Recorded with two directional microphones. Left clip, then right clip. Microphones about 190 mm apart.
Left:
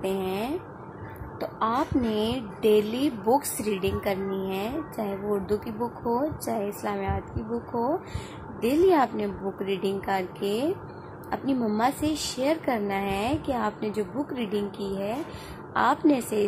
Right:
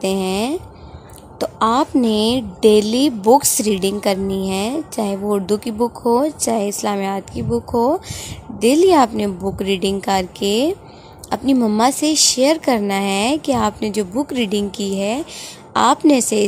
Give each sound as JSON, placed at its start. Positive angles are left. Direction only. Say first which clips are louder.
{"t": 0.0, "sound": "a woman's voice", "louder": "right 9 dB", "side_deg": -65}